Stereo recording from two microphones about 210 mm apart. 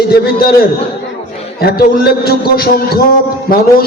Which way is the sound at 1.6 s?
45° left (ahead or behind).